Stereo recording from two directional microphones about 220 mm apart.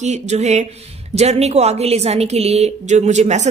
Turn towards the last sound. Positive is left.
turn(degrees=-30)  # may be behind; listen again after turning